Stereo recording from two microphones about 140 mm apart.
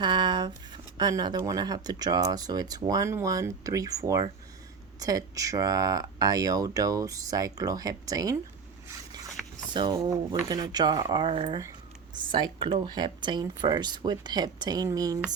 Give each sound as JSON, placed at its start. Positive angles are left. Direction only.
{"t": 0.0, "sound": "speech", "side_deg": -35}
{"t": 9.7, "sound": "speech", "side_deg": -30}
{"t": 12.6, "sound": "speech", "side_deg": -35}